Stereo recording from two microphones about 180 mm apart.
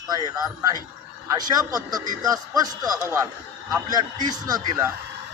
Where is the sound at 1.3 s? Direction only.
20° right (ahead or behind).